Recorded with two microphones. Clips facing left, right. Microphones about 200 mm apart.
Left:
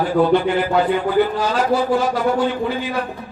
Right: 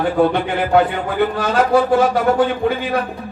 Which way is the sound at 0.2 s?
60° right (ahead or behind).